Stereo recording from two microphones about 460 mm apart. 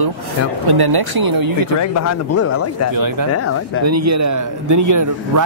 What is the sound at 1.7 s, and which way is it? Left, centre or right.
Speech, left.